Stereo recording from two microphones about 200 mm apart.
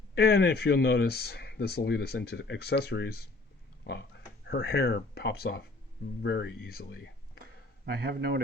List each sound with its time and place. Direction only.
0.1 s speech: 55° left (ahead or behind)
4.4 s speech: 55° left (ahead or behind)
7.9 s a man's voice: 55° right (ahead or behind)